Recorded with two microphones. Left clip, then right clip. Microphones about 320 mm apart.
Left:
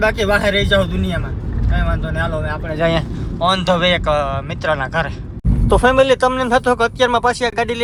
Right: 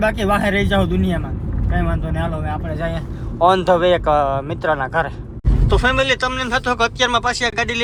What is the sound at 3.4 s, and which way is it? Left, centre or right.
Speech, centre.